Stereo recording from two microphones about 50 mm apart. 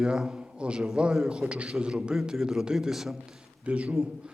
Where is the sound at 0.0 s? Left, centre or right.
Centre.